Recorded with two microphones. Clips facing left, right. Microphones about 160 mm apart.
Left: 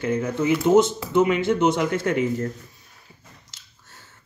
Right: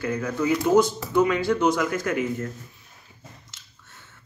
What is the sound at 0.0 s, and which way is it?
Speech, 25° left (ahead or behind).